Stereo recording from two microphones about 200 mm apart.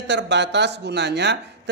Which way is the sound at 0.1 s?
60° right (ahead or behind).